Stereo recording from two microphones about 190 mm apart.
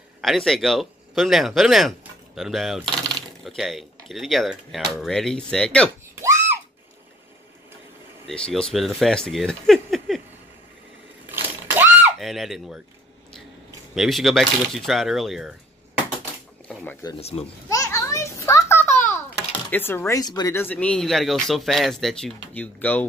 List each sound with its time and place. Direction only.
0.2 s speech: centre (ahead or behind)
6.2 s a sound: 10° right (ahead or behind)
8.3 s speech: 5° left (ahead or behind)
11.7 s a sound: 10° right (ahead or behind)
12.2 s speech: centre (ahead or behind)
13.9 s speech: centre (ahead or behind)
16.6 s speech: 10° left (ahead or behind)
17.2 s speech: 30° left (ahead or behind)
17.6 s a sound: 15° left (ahead or behind)
19.7 s speech: 10° left (ahead or behind)